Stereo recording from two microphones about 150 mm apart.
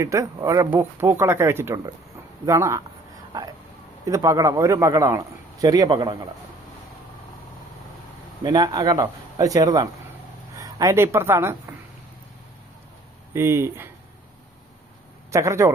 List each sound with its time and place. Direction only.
0.0 s a man's voice: 20° right (ahead or behind)
4.0 s a man's voice: 20° right (ahead or behind)
8.4 s a man's voice: 25° right (ahead or behind)
13.3 s speech: 15° right (ahead or behind)
15.3 s a man's voice: 20° right (ahead or behind)